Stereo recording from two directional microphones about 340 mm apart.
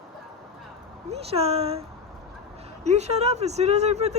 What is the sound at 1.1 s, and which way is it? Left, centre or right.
Speech, centre.